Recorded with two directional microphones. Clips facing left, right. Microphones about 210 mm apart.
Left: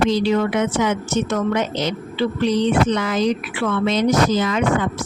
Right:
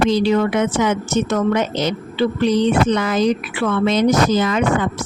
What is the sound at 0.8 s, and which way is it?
Speech, 45° right (ahead or behind).